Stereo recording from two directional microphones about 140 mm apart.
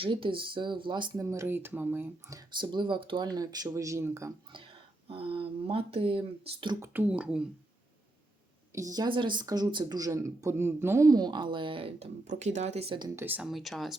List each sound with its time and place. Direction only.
0.0 s speech: 40° right (ahead or behind)
1.2 s speech: 20° right (ahead or behind)
2.6 s speech: 35° right (ahead or behind)
5.0 s speech: 40° right (ahead or behind)
6.8 s speech: 15° right (ahead or behind)
8.7 s speech: 25° right (ahead or behind); by 12.0 s 40° right (ahead or behind)
12.3 s speech: 55° right (ahead or behind)
13.1 s speech: 10° right (ahead or behind)
13.5 s speech: centre (ahead or behind)